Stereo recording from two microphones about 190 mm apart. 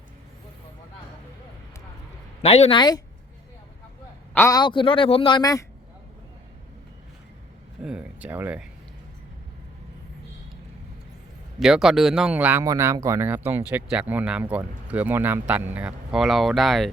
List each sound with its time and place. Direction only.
2.4 s a man's voice: 35° left (ahead or behind)
4.4 s a man's voice: 15° left (ahead or behind)
7.8 s speech: 5° right (ahead or behind)
11.6 s speech: centre (ahead or behind)